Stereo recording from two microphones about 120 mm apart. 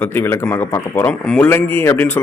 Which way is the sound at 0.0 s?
15° left (ahead or behind).